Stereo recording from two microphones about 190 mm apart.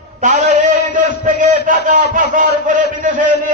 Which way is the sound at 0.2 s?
40° right (ahead or behind).